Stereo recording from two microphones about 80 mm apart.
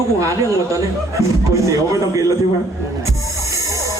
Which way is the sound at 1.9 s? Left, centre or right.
Right.